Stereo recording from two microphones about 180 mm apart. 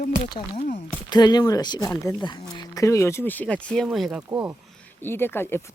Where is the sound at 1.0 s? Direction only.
25° left (ahead or behind); by 4.2 s centre (ahead or behind).